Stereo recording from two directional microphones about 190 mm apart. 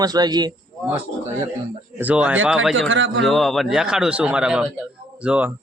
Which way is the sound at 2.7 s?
80° right.